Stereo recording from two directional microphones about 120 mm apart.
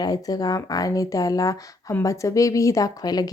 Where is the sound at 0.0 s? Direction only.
30° left (ahead or behind).